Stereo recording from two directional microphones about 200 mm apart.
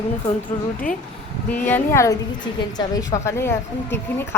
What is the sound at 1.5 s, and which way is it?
A woman's voice, 10° left (ahead or behind).